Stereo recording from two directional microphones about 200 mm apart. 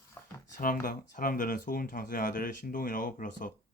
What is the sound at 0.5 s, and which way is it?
Speech, 45° left (ahead or behind).